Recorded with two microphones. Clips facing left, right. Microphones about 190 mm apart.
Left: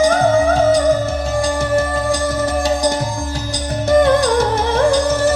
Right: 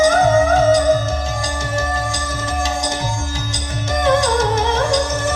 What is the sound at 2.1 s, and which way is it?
Music, 60° left (ahead or behind).